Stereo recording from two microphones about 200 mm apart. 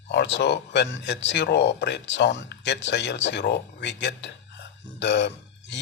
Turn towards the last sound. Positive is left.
turn(degrees=60)  # may be behind; listen again after turning